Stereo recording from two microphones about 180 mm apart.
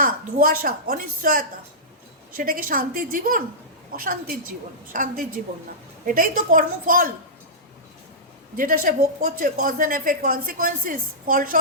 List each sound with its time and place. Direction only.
0.0 s speech: 50° right (ahead or behind)
8.5 s speech: 50° right (ahead or behind)